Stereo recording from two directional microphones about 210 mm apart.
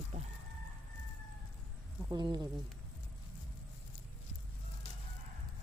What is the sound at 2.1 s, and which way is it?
Speech, 20° right (ahead or behind).